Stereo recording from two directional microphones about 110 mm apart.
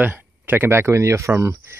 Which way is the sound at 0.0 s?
15° right (ahead or behind).